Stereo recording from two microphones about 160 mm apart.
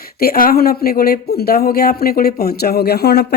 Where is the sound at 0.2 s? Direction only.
65° left (ahead or behind).